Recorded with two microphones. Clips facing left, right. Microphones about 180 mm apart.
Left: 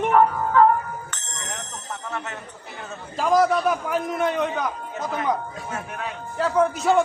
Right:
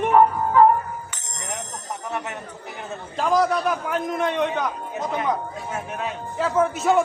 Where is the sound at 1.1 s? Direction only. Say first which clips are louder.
Right 2 dB; 10° right (ahead or behind).